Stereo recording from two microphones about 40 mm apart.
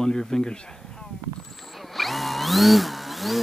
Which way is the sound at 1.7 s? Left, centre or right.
Centre.